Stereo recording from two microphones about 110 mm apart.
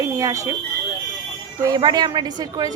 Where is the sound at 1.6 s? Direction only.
35° right (ahead or behind).